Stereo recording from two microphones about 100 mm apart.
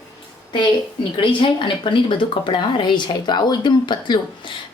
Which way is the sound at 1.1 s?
55° left (ahead or behind).